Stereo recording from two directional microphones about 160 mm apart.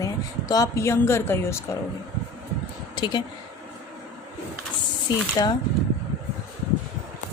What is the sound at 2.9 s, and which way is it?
Speech, 25° left (ahead or behind).